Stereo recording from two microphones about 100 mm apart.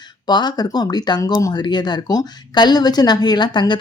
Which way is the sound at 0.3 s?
45° left (ahead or behind).